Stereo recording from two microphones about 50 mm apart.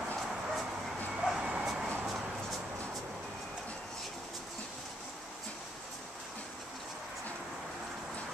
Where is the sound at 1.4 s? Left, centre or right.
Centre.